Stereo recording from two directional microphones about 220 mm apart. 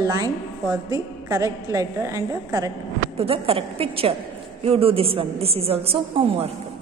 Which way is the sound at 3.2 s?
25° right (ahead or behind).